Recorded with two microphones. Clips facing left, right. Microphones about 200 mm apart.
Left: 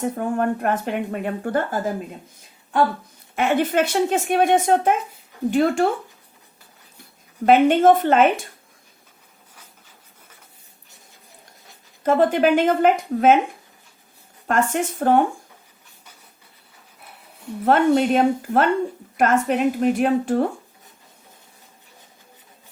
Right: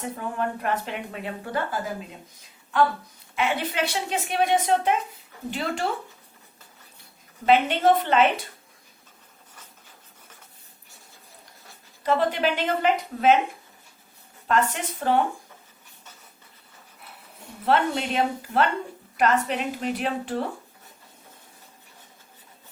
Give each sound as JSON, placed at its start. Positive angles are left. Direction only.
{"t": 0.0, "sound": "speech", "side_deg": 50}
{"t": 3.3, "sound": "speech", "side_deg": 50}
{"t": 7.4, "sound": "speech", "side_deg": 50}
{"t": 12.0, "sound": "speech", "side_deg": 50}
{"t": 14.4, "sound": "speech", "side_deg": 50}
{"t": 17.7, "sound": "speech", "side_deg": 45}